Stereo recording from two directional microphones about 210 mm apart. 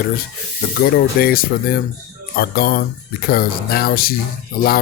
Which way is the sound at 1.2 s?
45° left (ahead or behind).